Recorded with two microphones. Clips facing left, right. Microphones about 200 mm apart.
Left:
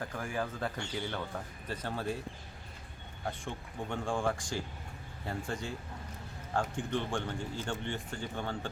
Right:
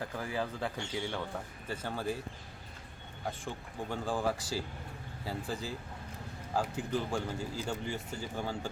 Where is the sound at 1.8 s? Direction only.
Centre (ahead or behind).